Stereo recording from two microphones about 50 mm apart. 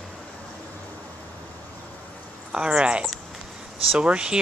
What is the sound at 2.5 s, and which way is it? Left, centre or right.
Speech, centre.